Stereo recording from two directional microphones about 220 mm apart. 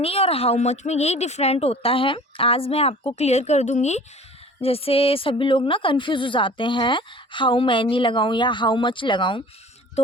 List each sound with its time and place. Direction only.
0.0 s a woman's voice: 25° left (ahead or behind)